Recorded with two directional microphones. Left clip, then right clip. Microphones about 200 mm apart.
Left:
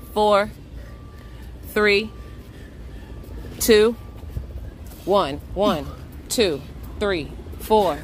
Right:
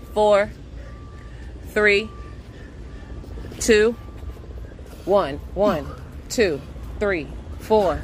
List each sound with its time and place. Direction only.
0.1 s speech: 15° left (ahead or behind)
1.7 s a woman's voice: 15° left (ahead or behind)
3.5 s speech: 15° left (ahead or behind)
5.0 s speech: 10° left (ahead or behind)